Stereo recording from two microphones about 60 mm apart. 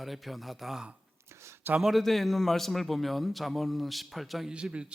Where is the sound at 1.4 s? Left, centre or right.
Right.